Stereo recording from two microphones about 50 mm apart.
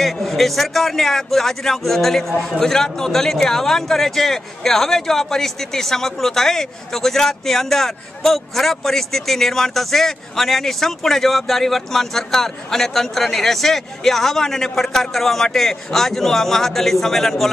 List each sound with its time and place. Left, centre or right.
0.0 s a man's voice: centre